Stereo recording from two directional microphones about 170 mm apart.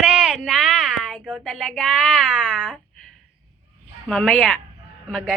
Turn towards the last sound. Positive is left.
turn(degrees=0)  # may be behind; listen again after turning